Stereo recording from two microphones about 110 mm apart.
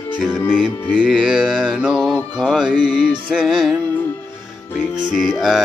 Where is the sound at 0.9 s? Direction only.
5° right (ahead or behind).